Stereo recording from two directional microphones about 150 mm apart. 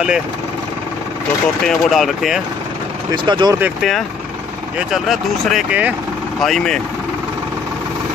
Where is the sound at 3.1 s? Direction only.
30° right (ahead or behind).